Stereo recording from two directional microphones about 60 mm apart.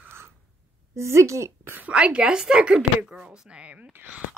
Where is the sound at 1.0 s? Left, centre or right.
Right.